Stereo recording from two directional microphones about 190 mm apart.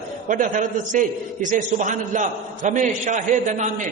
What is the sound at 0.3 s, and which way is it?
A man's voice, 45° right (ahead or behind).